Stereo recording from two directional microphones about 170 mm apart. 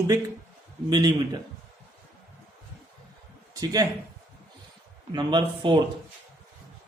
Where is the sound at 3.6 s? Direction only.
20° right (ahead or behind).